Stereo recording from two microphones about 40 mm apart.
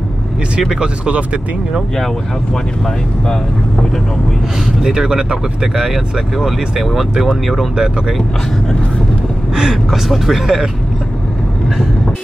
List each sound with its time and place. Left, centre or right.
0.7 s speech: right
4.8 s speech: centre
9.6 s speech: centre
10.0 s speech: centre